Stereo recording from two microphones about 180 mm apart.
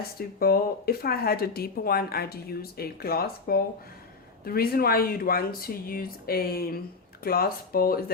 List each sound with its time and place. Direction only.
0.2 s speech: 55° left (ahead or behind)